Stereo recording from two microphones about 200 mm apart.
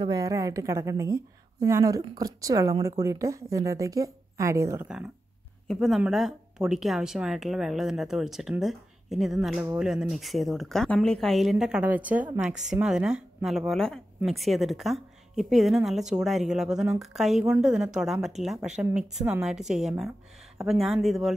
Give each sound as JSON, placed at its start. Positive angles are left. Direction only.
{"t": 0.0, "sound": "a woman's voice", "side_deg": -20}
{"t": 4.8, "sound": "a woman's voice", "side_deg": -5}